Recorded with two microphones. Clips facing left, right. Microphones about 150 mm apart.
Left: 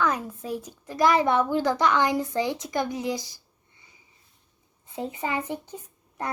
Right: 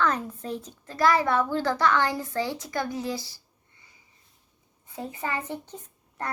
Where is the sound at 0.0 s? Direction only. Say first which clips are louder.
Even; 10° left (ahead or behind).